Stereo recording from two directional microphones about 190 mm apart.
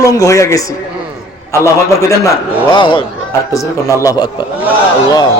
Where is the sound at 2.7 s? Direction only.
25° left (ahead or behind).